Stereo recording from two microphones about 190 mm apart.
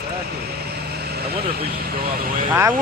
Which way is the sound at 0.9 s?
55° right (ahead or behind).